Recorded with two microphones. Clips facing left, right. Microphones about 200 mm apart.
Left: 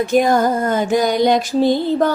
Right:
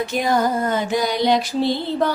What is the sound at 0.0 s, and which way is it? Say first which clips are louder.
Music: left 5 dB; 45° left (ahead or behind).